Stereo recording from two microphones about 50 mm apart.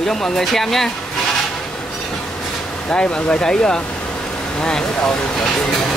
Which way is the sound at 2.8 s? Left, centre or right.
Centre.